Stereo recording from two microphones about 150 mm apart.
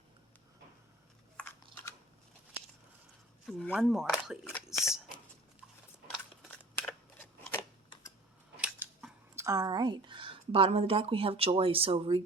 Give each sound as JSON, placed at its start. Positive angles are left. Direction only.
{"t": 3.4, "sound": "speech", "side_deg": 0}
{"t": 6.1, "sound": "scissors", "side_deg": 0}
{"t": 8.5, "sound": "scissors", "side_deg": -10}
{"t": 9.3, "sound": "a woman's voice", "side_deg": -20}